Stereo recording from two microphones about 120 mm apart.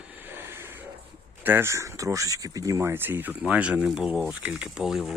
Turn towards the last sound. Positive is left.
turn(degrees=-5)  # may be behind; listen again after turning